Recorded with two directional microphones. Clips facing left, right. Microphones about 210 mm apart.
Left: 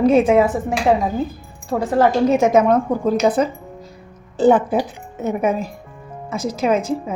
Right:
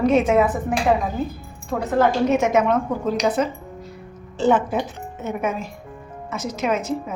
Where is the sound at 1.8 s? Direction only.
35° left (ahead or behind).